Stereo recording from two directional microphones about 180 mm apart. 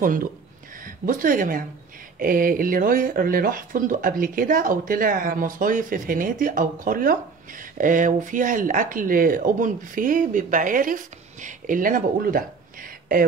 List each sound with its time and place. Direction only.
0.0 s speech: 50° right (ahead or behind)